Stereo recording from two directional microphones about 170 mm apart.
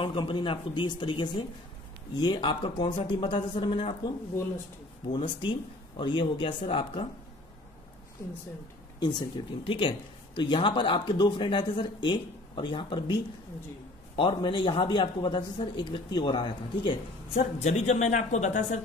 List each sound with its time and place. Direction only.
0.0 s speech: 30° left (ahead or behind)
5.1 s speech: 30° left (ahead or behind)
9.0 s speech: 30° left (ahead or behind); by 18.8 s 45° left (ahead or behind)